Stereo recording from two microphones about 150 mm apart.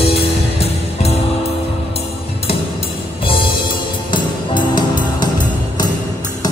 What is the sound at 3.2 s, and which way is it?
Music, 35° left (ahead or behind).